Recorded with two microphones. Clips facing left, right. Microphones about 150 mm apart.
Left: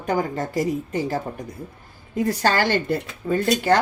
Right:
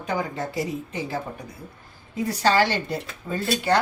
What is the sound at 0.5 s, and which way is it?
Speech, 45° left (ahead or behind).